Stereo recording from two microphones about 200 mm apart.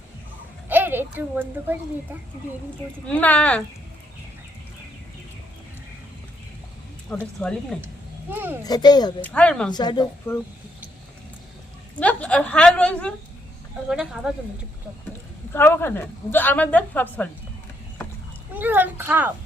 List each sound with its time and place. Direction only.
0.7 s a child's voice: 10° right (ahead or behind)
3.1 s a woman's voice: 5° left (ahead or behind)
7.2 s speech: centre (ahead or behind)
8.3 s speech: 10° right (ahead or behind)
8.6 s a woman's voice: 20° left (ahead or behind)
9.2 s speech: 5° left (ahead or behind)
9.7 s a woman's voice: 20° left (ahead or behind)
11.9 s a woman's voice: 5° left (ahead or behind)
15.5 s a woman's voice: 10° left (ahead or behind)
18.5 s speech: 10° right (ahead or behind)